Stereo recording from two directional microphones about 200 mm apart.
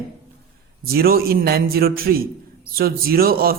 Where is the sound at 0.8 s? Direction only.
50° right (ahead or behind).